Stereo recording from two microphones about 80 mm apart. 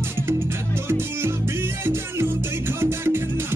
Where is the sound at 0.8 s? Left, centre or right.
Right.